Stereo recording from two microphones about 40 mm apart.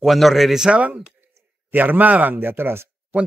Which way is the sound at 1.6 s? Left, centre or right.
Right.